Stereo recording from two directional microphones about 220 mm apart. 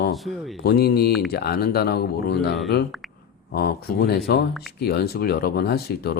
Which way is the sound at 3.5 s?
45° left (ahead or behind).